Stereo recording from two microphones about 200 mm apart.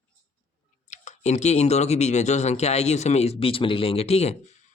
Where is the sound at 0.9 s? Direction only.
35° left (ahead or behind).